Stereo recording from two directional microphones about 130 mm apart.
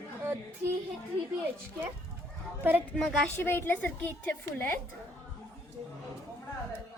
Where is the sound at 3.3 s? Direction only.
20° left (ahead or behind).